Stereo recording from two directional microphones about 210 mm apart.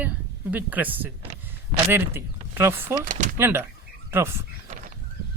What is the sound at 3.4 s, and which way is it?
Speech, 10° right (ahead or behind).